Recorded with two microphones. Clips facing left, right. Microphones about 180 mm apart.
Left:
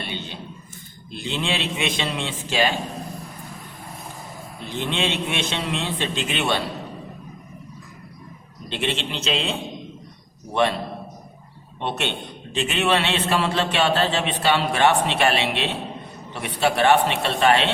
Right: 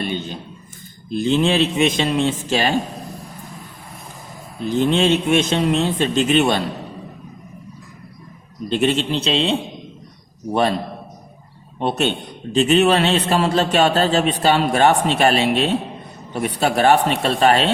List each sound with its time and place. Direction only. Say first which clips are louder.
0.0 s a sound: right 8 dB; 45° right (ahead or behind)
1.1 s a man's voice: right 10 dB; 45° right (ahead or behind)
4.7 s a man's voice: right 9 dB; 40° right (ahead or behind)
8.7 s a man's voice: right 8 dB; 45° right (ahead or behind)
11.8 s a man's voice: right 7 dB; 40° right (ahead or behind)